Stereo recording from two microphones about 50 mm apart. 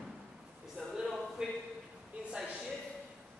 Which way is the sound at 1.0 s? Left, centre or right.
Centre.